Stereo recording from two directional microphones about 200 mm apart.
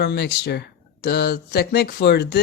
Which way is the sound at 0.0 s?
55° left (ahead or behind).